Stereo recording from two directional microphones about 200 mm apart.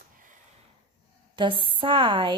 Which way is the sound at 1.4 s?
25° right (ahead or behind).